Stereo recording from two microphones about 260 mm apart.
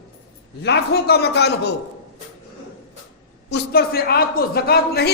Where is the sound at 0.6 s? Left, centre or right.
Left.